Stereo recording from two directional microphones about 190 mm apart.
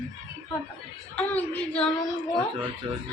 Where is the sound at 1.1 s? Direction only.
5° left (ahead or behind).